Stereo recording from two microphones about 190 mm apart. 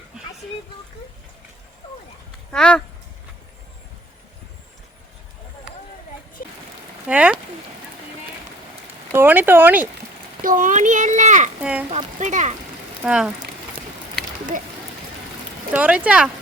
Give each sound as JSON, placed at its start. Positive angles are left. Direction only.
{"t": 2.5, "sound": "speech", "side_deg": 5}
{"t": 6.4, "sound": "a sound", "side_deg": 45}
{"t": 7.1, "sound": "speech", "side_deg": -5}
{"t": 9.1, "sound": "speech", "side_deg": -10}
{"t": 10.4, "sound": "a child's voice", "side_deg": -45}
{"t": 11.6, "sound": "speech", "side_deg": -5}
{"t": 11.9, "sound": "a child's voice", "side_deg": -35}
{"t": 13.1, "sound": "speech", "side_deg": -5}
{"t": 15.7, "sound": "speech", "side_deg": -5}